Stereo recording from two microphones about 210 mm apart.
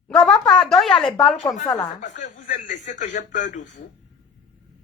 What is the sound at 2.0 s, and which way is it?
A man's voice, 35° left (ahead or behind).